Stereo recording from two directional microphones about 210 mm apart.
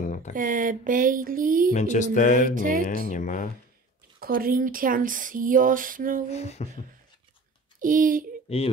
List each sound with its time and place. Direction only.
0.3 s speech: 40° right (ahead or behind)
1.7 s mantra: 35° left (ahead or behind)
2.5 s speech: 40° right (ahead or behind)
3.1 s mantra: 35° left (ahead or behind)
4.2 s speech: 45° right (ahead or behind)
6.3 s mantra: 30° left (ahead or behind)
7.8 s speech: 40° right (ahead or behind)
8.5 s speech: 30° left (ahead or behind)